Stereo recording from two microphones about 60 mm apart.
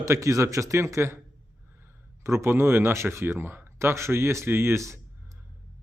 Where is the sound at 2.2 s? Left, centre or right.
Right.